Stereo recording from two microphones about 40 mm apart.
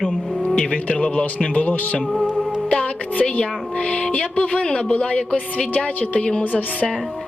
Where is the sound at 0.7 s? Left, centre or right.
Left.